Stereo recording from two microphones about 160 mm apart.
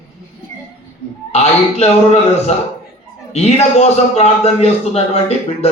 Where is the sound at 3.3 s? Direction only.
40° left (ahead or behind).